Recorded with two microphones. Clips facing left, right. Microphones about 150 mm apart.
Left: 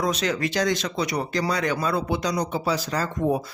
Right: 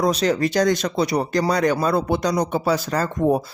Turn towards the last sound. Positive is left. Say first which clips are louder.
# right 4 dB
turn(degrees=-45)  # may be behind; listen again after turning